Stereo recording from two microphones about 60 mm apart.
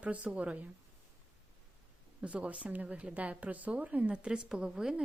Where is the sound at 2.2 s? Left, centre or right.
Centre.